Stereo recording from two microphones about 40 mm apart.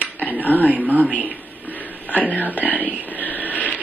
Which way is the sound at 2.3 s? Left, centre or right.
Left.